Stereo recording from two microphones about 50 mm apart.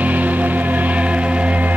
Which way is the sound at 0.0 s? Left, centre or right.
Right.